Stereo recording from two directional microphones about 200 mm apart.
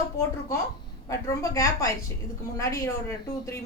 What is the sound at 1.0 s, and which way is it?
Speech, 15° left (ahead or behind).